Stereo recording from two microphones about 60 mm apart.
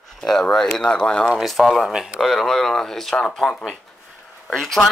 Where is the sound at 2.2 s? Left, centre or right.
Centre.